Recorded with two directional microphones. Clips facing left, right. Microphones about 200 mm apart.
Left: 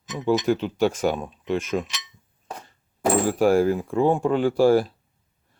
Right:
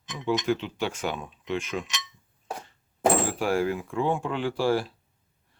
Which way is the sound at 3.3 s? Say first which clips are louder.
Left 7 dB; 45° left (ahead or behind).